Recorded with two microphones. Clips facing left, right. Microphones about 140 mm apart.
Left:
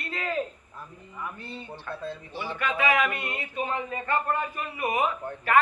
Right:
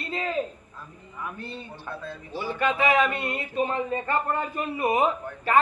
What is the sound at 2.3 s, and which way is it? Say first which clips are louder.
A man's voice: right 6 dB; 40° right (ahead or behind).